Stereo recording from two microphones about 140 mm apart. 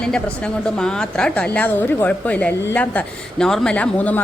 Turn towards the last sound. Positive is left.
turn(degrees=10)  # may be behind; listen again after turning